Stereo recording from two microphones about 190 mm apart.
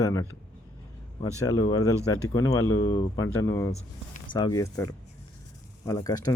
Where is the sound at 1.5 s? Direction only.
20° left (ahead or behind).